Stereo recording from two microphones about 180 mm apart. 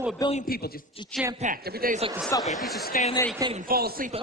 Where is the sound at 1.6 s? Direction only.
55° right (ahead or behind).